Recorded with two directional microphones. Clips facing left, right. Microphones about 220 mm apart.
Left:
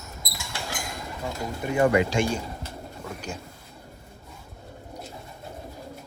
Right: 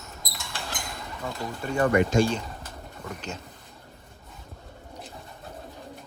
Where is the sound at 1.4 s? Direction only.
15° left (ahead or behind).